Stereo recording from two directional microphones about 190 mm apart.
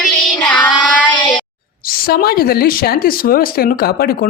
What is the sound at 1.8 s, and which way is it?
Speech, 50° left (ahead or behind).